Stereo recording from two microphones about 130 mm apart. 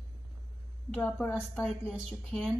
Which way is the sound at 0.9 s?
15° left (ahead or behind).